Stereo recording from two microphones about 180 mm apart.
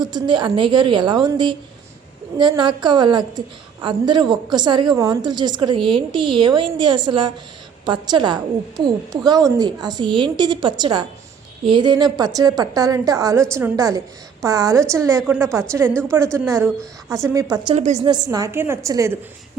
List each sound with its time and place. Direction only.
0.0 s a woman's voice: 25° right (ahead or behind)
17.7 s a woman's voice: 40° right (ahead or behind)
18.1 s a woman's voice: 20° right (ahead or behind)